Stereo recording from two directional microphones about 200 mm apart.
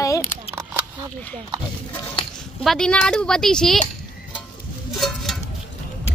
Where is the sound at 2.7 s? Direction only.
5° left (ahead or behind).